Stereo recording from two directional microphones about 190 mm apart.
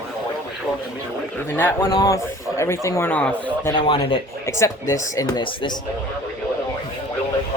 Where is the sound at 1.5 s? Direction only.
10° left (ahead or behind).